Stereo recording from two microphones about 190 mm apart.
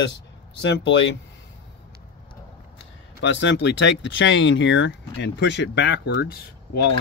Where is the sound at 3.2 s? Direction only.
75° left (ahead or behind).